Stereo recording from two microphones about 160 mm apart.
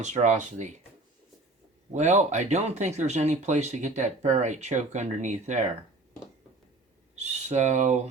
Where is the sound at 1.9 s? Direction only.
45° right (ahead or behind).